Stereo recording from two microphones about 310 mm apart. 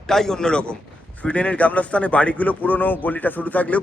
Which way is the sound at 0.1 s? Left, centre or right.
Centre.